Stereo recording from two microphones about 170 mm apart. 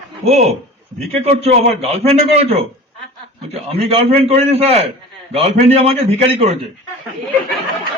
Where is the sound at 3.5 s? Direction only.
35° right (ahead or behind).